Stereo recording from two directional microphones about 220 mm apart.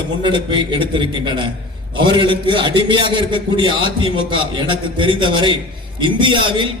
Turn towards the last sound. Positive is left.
turn(degrees=-20)  # may be behind; listen again after turning